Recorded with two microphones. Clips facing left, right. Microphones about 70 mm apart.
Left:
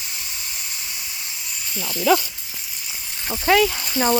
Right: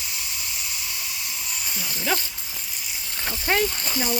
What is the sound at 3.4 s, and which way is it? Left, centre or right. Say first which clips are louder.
Speech: left 6 dB; left.